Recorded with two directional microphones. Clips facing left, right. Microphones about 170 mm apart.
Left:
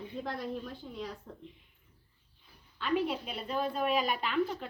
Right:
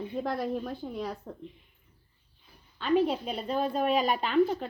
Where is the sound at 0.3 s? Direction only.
40° right (ahead or behind).